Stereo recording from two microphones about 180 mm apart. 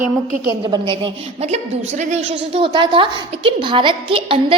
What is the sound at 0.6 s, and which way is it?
A woman's voice, 25° right (ahead or behind).